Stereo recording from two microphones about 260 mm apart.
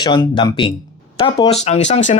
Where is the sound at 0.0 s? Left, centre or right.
Centre.